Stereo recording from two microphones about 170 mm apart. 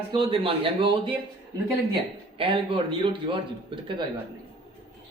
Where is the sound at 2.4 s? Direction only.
30° right (ahead or behind).